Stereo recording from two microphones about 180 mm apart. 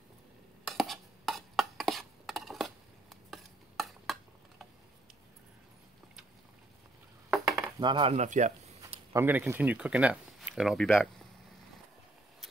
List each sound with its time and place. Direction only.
0.7 s chopping: centre (ahead or behind)
3.3 s stir: centre (ahead or behind)
7.2 s dishes: centre (ahead or behind)
7.8 s speech: 25° right (ahead or behind)
8.1 s speech: 40° right (ahead or behind)
9.1 s speech: 10° right (ahead or behind)